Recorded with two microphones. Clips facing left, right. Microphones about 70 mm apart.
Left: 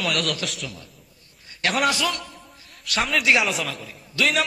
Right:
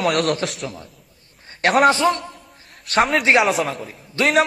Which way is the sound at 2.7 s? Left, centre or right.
Right.